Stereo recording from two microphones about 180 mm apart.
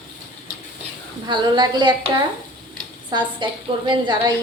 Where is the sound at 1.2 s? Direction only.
25° right (ahead or behind).